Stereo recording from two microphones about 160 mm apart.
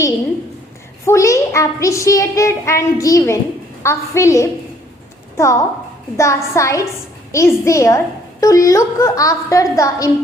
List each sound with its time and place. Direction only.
1.0 s a woman's voice: 20° left (ahead or behind)